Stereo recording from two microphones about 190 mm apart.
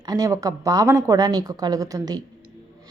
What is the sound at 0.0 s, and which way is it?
A woman's voice, 20° right (ahead or behind).